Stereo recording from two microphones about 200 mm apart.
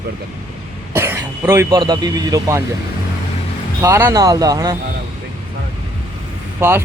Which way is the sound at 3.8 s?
15° right (ahead or behind).